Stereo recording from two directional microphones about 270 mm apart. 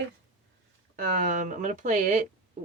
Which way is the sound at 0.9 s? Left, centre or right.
Right.